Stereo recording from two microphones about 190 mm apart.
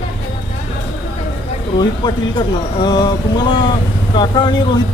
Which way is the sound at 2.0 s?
25° left (ahead or behind).